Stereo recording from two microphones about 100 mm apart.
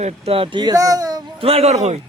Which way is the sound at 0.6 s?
35° right (ahead or behind).